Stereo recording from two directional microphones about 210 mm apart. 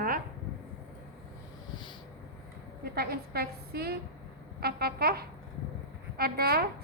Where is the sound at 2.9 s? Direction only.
45° right (ahead or behind).